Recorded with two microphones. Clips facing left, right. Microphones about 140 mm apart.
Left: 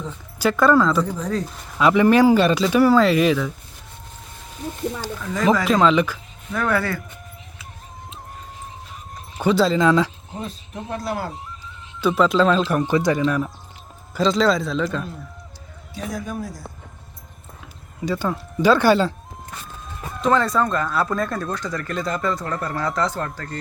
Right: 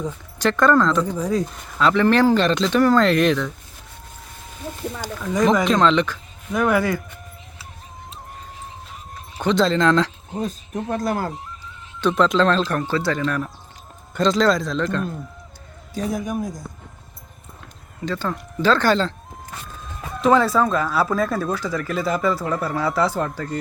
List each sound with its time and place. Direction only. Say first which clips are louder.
0.3 s speech: left 1 dB; 5° left (ahead or behind)
1.0 s a woman's voice: right 3 dB; 10° right (ahead or behind)
1.8 s speech: left 2 dB; 10° left (ahead or behind)
4.9 s a woman's voice: right 4 dB; 15° right (ahead or behind)
5.6 s speech: even; 5° left (ahead or behind)
6.5 s a woman's voice: right 3 dB; 15° right (ahead or behind)
9.4 s speech: left 1 dB; 5° left (ahead or behind)
10.4 s speech: right 6 dB; 50° right (ahead or behind)
11.9 s speech: even; 5° left (ahead or behind)
16.1 s a woman's voice: right 4 dB; 15° right (ahead or behind)
18.0 s speech: left 2 dB; 10° left (ahead or behind)
20.2 s speech: right 2 dB; 5° right (ahead or behind)